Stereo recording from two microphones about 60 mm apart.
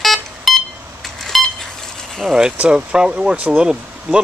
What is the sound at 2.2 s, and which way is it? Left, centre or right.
Speech, centre.